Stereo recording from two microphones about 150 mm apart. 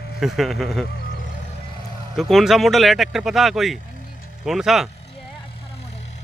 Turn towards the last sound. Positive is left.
turn(degrees=0)  # may be behind; listen again after turning